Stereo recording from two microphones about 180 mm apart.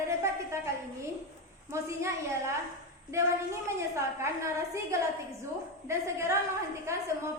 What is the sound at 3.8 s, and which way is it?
A woman's voice, 15° right (ahead or behind).